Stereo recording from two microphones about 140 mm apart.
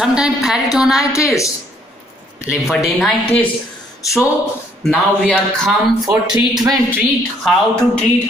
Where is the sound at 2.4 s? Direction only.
Centre (ahead or behind).